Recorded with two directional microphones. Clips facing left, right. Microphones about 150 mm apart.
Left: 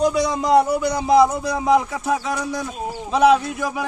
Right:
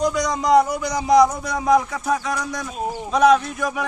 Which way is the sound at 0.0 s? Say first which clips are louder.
Left 3 dB; 30° left (ahead or behind).